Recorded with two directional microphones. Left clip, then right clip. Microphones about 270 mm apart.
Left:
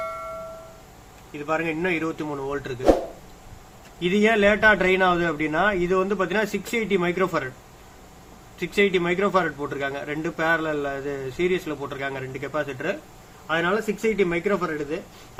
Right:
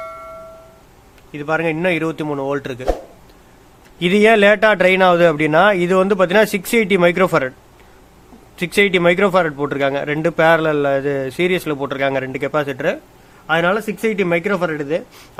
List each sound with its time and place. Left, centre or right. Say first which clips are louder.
0.0 s music: even; centre
1.3 s a man's voice: right 7 dB; right
4.0 s a man's voice: right 8 dB; right
8.5 s a man's voice: right 6 dB; right